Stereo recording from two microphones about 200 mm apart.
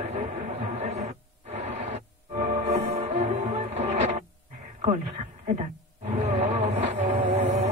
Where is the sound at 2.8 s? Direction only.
35° right (ahead or behind).